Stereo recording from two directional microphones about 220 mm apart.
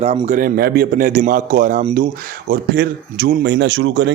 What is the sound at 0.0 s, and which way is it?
A man's voice, 30° right (ahead or behind).